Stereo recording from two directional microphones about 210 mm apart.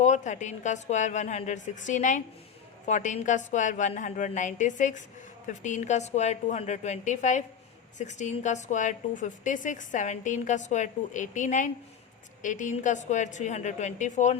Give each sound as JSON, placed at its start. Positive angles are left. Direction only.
{"t": 0.0, "sound": "a woman's voice", "side_deg": 35}